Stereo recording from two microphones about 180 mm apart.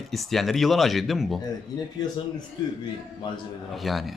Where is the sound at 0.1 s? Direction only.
Centre (ahead or behind).